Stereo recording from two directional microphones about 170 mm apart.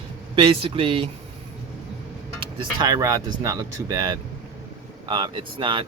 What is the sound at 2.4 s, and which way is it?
Speech, 25° right (ahead or behind).